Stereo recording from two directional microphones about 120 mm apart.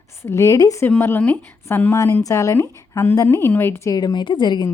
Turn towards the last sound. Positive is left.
turn(degrees=35)  # may be behind; listen again after turning